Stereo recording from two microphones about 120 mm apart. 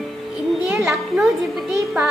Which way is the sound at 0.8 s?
5° right (ahead or behind).